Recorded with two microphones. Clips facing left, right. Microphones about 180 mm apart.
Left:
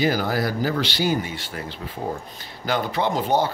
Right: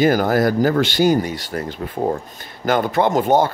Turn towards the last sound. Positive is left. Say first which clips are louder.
# right 6 dB
turn(degrees=-50)  # may be behind; listen again after turning